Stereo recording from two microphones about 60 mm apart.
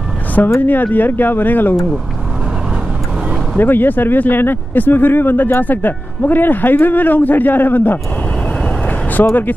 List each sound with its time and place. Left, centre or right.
0.6 s speech: left
3.5 s speech: left
9.2 s speech: left